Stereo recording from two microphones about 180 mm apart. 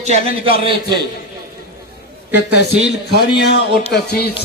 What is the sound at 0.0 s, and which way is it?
A man's voice, 35° right (ahead or behind).